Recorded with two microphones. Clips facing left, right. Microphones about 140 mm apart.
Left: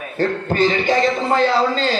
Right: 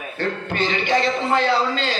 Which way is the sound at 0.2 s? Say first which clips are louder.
Left 6 dB; 40° left (ahead or behind).